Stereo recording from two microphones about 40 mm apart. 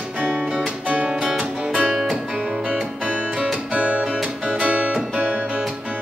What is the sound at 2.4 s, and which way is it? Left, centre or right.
Music, right.